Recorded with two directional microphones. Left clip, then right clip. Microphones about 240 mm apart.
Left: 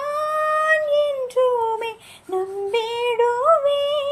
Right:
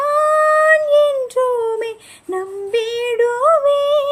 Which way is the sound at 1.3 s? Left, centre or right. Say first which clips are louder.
Right 2 dB; right.